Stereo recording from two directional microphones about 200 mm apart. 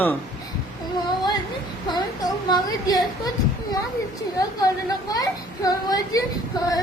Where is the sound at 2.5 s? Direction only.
20° left (ahead or behind).